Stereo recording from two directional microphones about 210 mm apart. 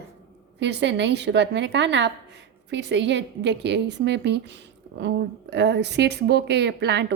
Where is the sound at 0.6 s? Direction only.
55° right (ahead or behind).